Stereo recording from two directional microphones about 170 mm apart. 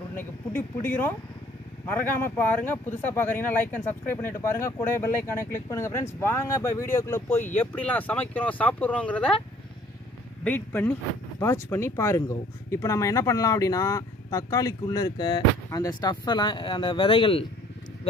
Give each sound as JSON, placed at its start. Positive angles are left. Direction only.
{"t": 0.1, "sound": "speech", "side_deg": 10}
{"t": 10.4, "sound": "speech", "side_deg": 10}